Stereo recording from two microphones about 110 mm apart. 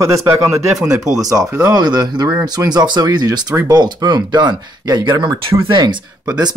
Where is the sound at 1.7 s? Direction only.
40° right (ahead or behind).